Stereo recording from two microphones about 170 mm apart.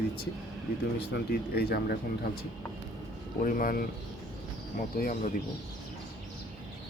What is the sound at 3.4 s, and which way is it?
Speech, 55° left (ahead or behind).